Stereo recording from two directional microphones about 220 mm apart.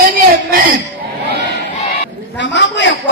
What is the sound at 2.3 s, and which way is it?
Speech, 55° left (ahead or behind).